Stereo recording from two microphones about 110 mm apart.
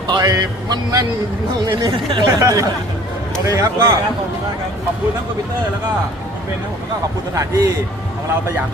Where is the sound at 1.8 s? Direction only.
30° right (ahead or behind).